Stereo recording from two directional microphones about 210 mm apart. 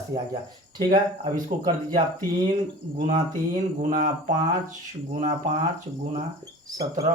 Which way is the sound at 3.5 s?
35° right (ahead or behind).